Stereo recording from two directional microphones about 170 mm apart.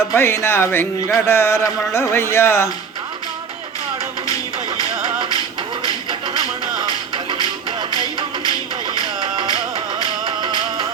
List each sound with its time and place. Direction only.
0.1 s speech: 15° left (ahead or behind)
6.1 s music: 25° right (ahead or behind)
7.9 s music: 25° left (ahead or behind)
9.2 s music: 25° right (ahead or behind)